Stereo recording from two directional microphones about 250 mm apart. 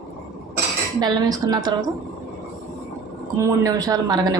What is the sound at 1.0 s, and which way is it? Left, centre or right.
Speech, centre.